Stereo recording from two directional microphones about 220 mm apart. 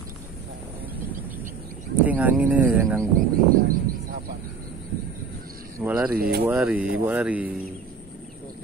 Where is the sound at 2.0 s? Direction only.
5° right (ahead or behind).